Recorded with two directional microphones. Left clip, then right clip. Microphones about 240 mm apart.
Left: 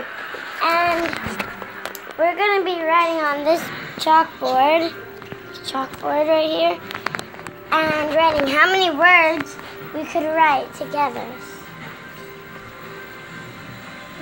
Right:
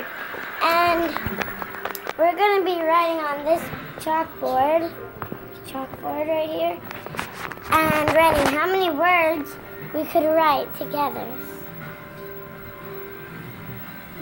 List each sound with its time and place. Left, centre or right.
0.6 s babbling: centre
2.1 s a child's voice: centre
3.2 s speech: left
7.7 s a child's voice: centre
8.5 s a child's voice: centre
9.9 s a child's voice: centre
10.9 s a child's voice: centre